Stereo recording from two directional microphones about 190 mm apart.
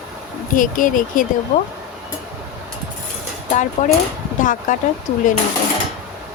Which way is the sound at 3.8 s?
40° left (ahead or behind).